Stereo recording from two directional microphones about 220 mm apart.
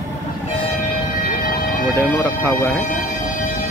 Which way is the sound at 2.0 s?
10° left (ahead or behind).